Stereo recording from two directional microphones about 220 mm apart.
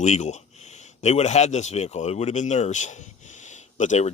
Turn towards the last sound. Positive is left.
turn(degrees=30)  # may be behind; listen again after turning